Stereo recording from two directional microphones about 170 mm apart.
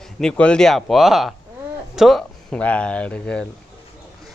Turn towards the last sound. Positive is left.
turn(degrees=5)  # may be behind; listen again after turning